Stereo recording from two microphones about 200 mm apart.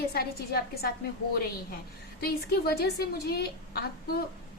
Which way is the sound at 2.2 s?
50° left (ahead or behind).